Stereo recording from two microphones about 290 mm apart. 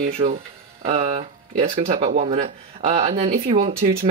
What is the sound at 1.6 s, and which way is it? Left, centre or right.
Speech, right.